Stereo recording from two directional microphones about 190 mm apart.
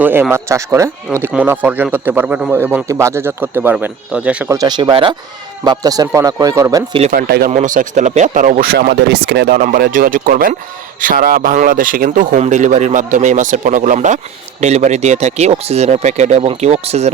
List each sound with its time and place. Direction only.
0.0 s a man's voice: 10° right (ahead or behind)
4.5 s a man's voice: 20° right (ahead or behind)
7.0 s speech: 50° right (ahead or behind)
7.5 s speech: 40° right (ahead or behind); by 9.6 s 60° right (ahead or behind)
9.6 s speech: 45° right (ahead or behind)